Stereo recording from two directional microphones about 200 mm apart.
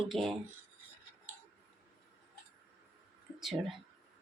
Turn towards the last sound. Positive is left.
turn(degrees=0)  # may be behind; listen again after turning